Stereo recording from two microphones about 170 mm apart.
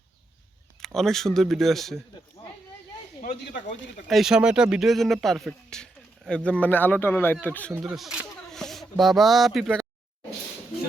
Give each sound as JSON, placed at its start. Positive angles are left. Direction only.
{"t": 0.8, "sound": "speech", "side_deg": 0}
{"t": 3.2, "sound": "speech", "side_deg": 80}
{"t": 4.1, "sound": "speech", "side_deg": -5}
{"t": 7.7, "sound": "speech", "side_deg": -10}